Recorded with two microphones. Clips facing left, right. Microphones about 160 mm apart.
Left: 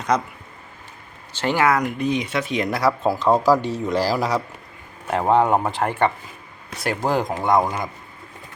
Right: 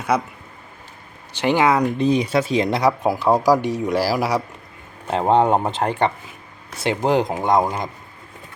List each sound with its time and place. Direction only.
0.1 s speech: 10° right (ahead or behind)
1.3 s speech: 15° right (ahead or behind)
1.8 s speech: 30° right (ahead or behind); by 4.4 s 10° right (ahead or behind)
5.1 s speech: 25° right (ahead or behind)